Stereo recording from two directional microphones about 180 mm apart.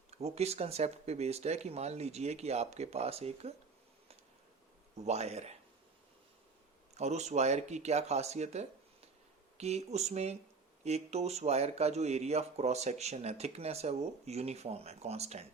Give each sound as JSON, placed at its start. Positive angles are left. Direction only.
{"t": 0.1, "sound": "speech", "side_deg": -35}
{"t": 4.9, "sound": "speech", "side_deg": -35}
{"t": 6.9, "sound": "speech", "side_deg": -40}